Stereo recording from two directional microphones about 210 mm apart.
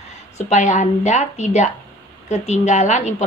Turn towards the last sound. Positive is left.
turn(degrees=35)  # may be behind; listen again after turning